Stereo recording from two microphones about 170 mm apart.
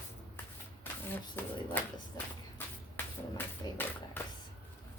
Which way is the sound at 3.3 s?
10° left (ahead or behind).